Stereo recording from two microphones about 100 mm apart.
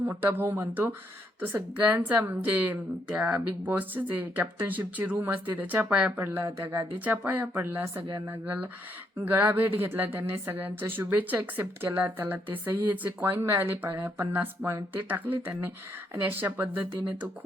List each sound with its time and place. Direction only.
0.0 s a woman's voice: 20° right (ahead or behind)
6.1 s speech: 25° right (ahead or behind)
7.0 s a woman's voice: 15° right (ahead or behind)
9.1 s speech: 20° right (ahead or behind)